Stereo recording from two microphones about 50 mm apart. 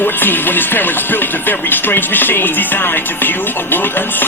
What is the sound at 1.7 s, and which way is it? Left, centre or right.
Speech, left.